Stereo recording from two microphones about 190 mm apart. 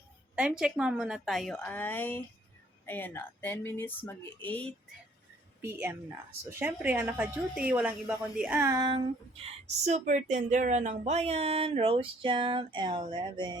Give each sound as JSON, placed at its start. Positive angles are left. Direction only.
{"t": 0.3, "sound": "a woman's voice", "side_deg": -5}
{"t": 5.6, "sound": "a woman's voice", "side_deg": -10}
{"t": 11.0, "sound": "a sound", "side_deg": -35}